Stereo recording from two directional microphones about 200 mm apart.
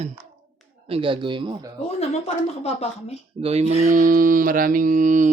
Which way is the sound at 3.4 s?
30° right (ahead or behind).